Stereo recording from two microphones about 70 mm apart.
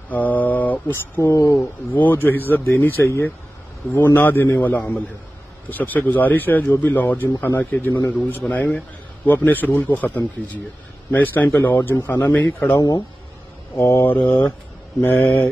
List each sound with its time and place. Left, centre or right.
0.1 s mantra: left
1.3 s speech: left
1.9 s speech: left
13.7 s speech: left